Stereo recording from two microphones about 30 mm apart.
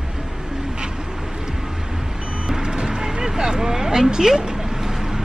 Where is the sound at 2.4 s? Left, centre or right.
Right.